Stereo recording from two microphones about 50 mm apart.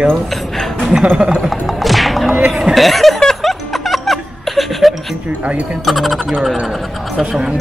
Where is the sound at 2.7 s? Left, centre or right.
Centre.